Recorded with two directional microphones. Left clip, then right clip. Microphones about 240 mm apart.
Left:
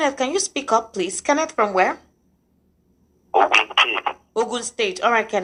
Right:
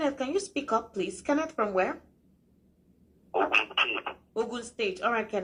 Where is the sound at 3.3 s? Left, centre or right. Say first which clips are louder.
Left 10 dB; left.